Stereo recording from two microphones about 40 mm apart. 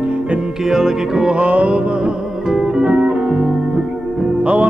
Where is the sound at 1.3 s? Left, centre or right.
Right.